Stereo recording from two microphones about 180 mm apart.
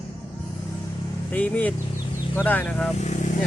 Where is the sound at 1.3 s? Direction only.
10° left (ahead or behind).